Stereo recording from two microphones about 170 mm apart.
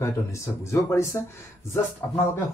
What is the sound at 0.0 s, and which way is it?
Speech, 15° left (ahead or behind).